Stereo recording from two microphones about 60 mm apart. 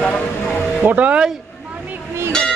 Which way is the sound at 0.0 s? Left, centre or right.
Centre.